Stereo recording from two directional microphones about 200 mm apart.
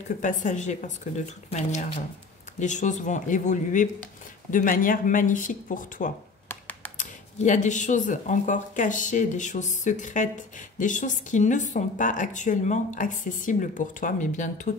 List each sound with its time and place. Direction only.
0.2 s speech: 40° left (ahead or behind)
6.5 s computer keyboard: 10° left (ahead or behind)
7.0 s speech: 40° left (ahead or behind)